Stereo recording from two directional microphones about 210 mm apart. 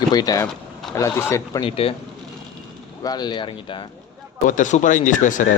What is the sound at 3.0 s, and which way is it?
Speech, 20° left (ahead or behind).